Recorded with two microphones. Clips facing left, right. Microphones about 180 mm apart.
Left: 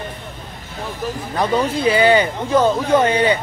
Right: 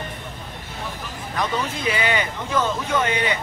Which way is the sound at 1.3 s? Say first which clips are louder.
Left 6 dB; 35° left (ahead or behind).